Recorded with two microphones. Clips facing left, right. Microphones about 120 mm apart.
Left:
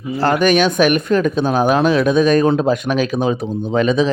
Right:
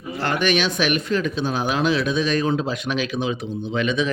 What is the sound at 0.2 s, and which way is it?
Speech, 40° left (ahead or behind).